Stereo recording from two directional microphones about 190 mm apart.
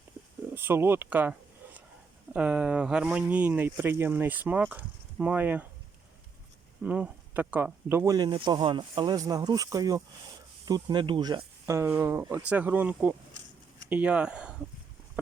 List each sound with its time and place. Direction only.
0.5 s speech: 10° right (ahead or behind)
6.8 s speech: 10° right (ahead or behind)